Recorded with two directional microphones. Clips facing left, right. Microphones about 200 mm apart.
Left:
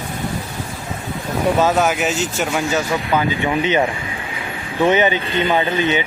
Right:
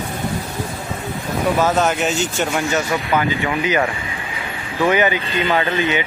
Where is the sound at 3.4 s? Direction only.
25° left (ahead or behind).